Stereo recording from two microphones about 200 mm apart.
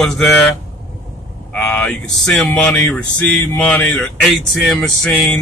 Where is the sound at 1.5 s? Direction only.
5° left (ahead or behind).